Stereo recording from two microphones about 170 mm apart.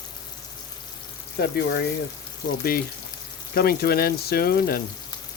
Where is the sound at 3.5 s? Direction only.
65° left (ahead or behind).